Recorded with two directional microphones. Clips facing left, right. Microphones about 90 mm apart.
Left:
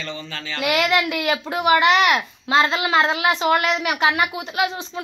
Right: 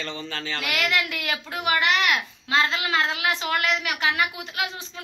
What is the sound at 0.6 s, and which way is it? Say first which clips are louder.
Speech: left 7 dB; 25° left (ahead or behind).